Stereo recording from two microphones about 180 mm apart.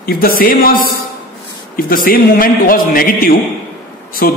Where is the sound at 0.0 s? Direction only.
55° left (ahead or behind).